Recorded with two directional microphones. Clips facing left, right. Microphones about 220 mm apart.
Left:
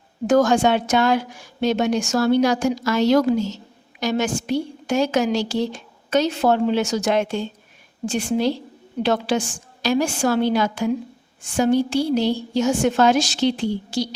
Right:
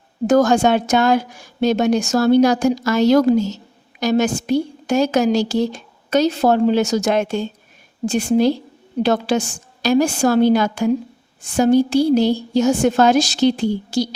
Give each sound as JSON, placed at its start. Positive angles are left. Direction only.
{"t": 0.3, "sound": "a woman's voice", "side_deg": -40}